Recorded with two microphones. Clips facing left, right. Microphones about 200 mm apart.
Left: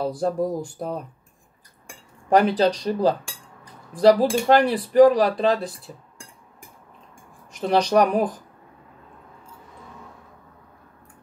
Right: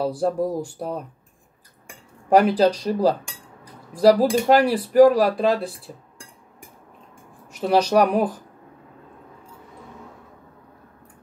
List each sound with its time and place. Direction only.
0.0 s speech: 5° right (ahead or behind)
2.2 s speech: 5° right (ahead or behind)
7.5 s speech: 5° right (ahead or behind)